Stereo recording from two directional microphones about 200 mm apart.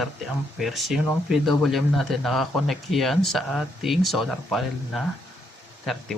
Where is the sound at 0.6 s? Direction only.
Centre (ahead or behind).